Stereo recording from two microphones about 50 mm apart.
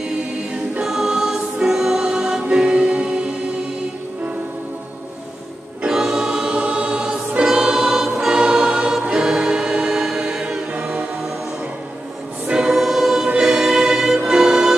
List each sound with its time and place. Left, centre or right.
0.7 s music: centre
2.5 s choir: right
5.9 s choir: centre
6.5 s choir: right
12.5 s choir: centre
13.4 s music: centre